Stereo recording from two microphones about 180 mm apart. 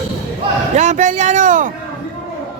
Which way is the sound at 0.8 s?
40° right (ahead or behind).